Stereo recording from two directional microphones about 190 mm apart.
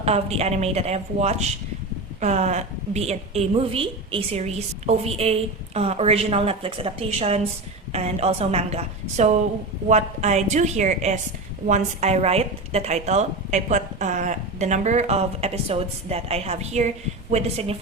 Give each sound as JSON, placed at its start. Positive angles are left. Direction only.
{"t": 0.0, "sound": "speech", "side_deg": -35}